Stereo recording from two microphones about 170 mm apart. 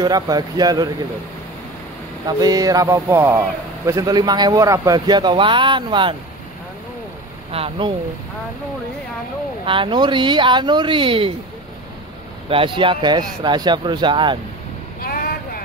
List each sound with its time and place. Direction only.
0.0 s speech: 25° right (ahead or behind)
2.2 s speech: 20° right (ahead or behind)
7.5 s speech: 35° right (ahead or behind)
9.7 s speech: 30° right (ahead or behind)
12.4 s speech: 30° right (ahead or behind)
15.0 s vehicle: 60° left (ahead or behind)